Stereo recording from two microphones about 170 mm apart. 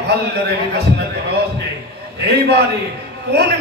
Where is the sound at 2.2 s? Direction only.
70° right (ahead or behind).